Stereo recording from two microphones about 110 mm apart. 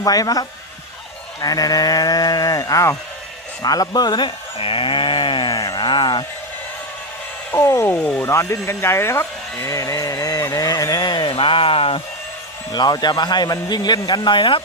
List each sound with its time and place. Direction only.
0.0 s speech: 35° left (ahead or behind)
4.5 s speech: 55° left (ahead or behind)
7.5 s speech: 25° left (ahead or behind)
9.6 s a sound: 30° left (ahead or behind); by 12.0 s 60° left (ahead or behind)
12.7 s speech: 40° left (ahead or behind)